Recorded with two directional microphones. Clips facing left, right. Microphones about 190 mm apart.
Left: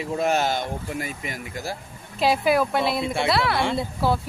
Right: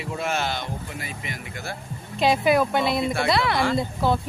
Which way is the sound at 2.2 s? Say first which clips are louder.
Right 1 dB; 5° left (ahead or behind).